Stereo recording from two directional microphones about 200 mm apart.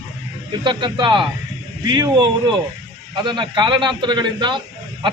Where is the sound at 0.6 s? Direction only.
25° right (ahead or behind).